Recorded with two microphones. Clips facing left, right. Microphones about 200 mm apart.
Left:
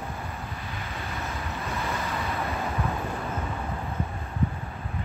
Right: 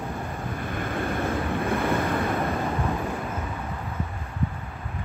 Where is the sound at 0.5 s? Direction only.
50° right (ahead or behind).